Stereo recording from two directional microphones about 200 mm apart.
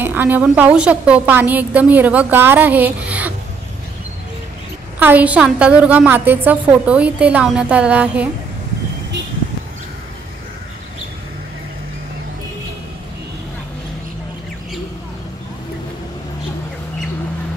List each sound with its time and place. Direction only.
0.0 s a woman's voice: 10° right (ahead or behind)
4.9 s a woman's voice: 10° right (ahead or behind)